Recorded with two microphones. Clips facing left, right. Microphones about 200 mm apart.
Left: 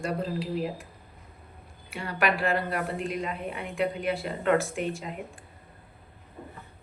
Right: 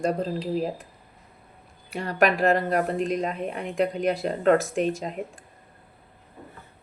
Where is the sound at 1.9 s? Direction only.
40° right (ahead or behind).